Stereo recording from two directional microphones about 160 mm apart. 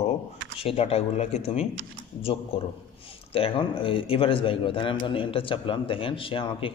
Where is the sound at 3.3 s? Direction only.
35° left (ahead or behind).